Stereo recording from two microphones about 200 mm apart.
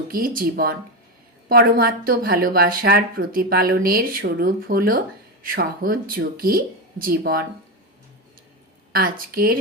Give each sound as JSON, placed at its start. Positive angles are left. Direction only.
{"t": 0.1, "sound": "speech", "side_deg": -45}
{"t": 8.9, "sound": "speech", "side_deg": -45}